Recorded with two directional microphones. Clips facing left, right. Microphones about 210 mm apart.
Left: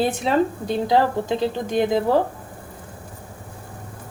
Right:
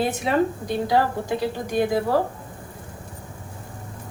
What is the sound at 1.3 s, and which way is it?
Speech, 20° left (ahead or behind).